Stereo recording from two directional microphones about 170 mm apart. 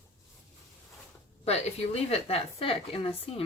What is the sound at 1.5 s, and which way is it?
Speech, 40° left (ahead or behind).